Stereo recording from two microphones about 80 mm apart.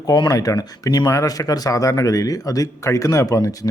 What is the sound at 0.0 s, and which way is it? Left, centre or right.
Speech, left.